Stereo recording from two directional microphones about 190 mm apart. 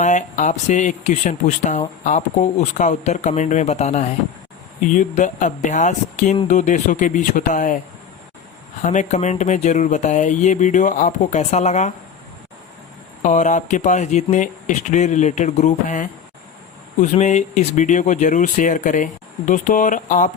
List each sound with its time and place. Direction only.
0.0 s speech: 40° left (ahead or behind)
8.8 s speech: 40° left (ahead or behind)
13.2 s speech: 40° left (ahead or behind)